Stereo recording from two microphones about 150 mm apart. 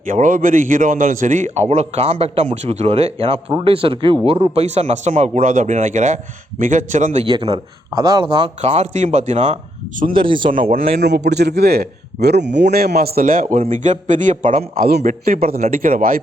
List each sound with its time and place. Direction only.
0.0 s a man's voice: 60° right (ahead or behind)
7.3 s speech: 35° right (ahead or behind)
8.6 s a man's voice: 50° right (ahead or behind)
10.2 s speech: 35° right (ahead or behind)
11.0 s speech: 90° right
13.0 s a man's voice: 75° right (ahead or behind)
13.6 s a man's voice: 55° right (ahead or behind); by 16.2 s 70° right (ahead or behind)